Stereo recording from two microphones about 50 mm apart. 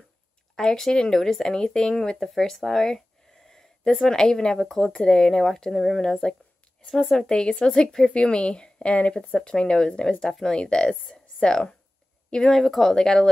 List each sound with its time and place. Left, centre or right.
0.6 s speech: centre
3.4 s a sound: centre
4.0 s a woman's voice: centre